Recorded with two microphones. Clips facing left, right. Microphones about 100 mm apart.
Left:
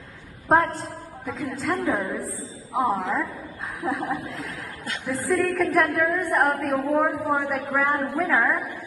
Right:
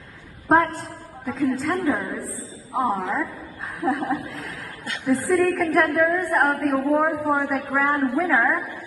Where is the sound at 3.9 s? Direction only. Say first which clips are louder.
Right 3 dB; 5° left (ahead or behind).